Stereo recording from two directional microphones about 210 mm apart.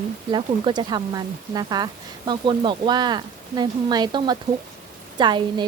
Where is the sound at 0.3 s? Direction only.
20° right (ahead or behind).